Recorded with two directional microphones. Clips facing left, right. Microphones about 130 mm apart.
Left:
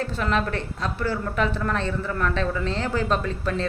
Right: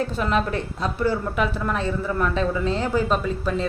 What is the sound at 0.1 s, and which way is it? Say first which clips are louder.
Speech: right 2 dB; 15° right (ahead or behind).